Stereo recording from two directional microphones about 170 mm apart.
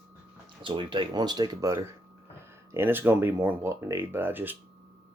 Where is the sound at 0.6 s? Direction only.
30° right (ahead or behind); by 4.5 s 10° right (ahead or behind).